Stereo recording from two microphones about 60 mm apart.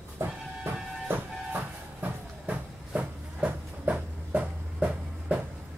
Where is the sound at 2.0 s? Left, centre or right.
Right.